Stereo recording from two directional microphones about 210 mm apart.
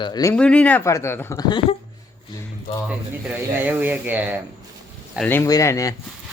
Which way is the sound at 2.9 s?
10° right (ahead or behind).